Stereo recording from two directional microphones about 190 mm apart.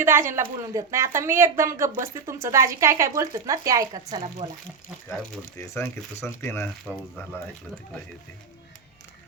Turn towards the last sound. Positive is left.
turn(degrees=10)  # may be behind; listen again after turning